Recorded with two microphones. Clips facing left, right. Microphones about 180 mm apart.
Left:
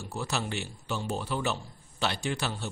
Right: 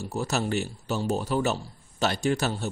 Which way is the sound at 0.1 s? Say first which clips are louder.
Right 6 dB; 40° right (ahead or behind).